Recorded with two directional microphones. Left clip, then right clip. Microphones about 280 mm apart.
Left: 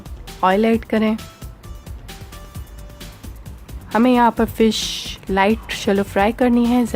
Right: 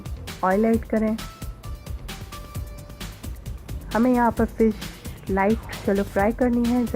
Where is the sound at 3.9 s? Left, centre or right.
Left.